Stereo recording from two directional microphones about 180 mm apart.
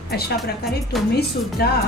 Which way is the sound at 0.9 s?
Centre (ahead or behind).